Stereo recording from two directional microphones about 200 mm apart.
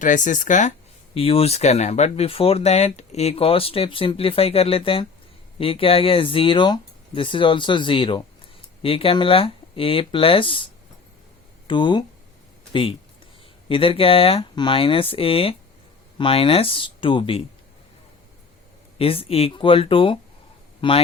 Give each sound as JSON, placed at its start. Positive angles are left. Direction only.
{"t": 0.0, "sound": "speech", "side_deg": 40}
{"t": 1.1, "sound": "speech", "side_deg": 30}
{"t": 11.7, "sound": "speech", "side_deg": 25}
{"t": 13.7, "sound": "speech", "side_deg": 25}
{"t": 18.9, "sound": "speech", "side_deg": 30}